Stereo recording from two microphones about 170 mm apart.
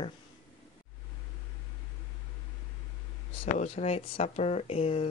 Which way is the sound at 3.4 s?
40° left (ahead or behind).